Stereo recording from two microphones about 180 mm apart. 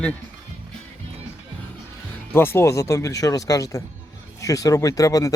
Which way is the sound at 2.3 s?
15° left (ahead or behind).